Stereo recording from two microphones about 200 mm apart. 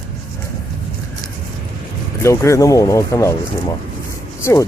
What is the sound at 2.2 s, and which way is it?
Speech, 15° left (ahead or behind).